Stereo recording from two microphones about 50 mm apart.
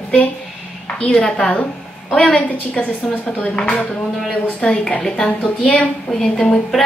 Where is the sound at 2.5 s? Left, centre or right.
Left.